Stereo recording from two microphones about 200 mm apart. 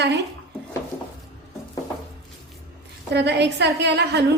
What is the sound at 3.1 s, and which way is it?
A woman's voice, 60° right (ahead or behind).